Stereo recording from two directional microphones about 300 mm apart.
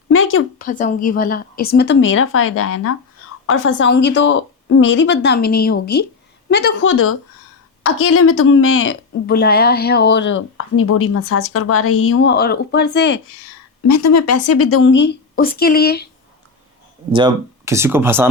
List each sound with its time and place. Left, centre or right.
0.1 s a sound: left
0.6 s a woman's voice: left
13.8 s speech: left
17.1 s speech: centre